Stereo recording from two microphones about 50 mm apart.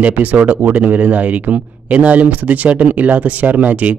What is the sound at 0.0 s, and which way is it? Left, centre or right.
Speech, right.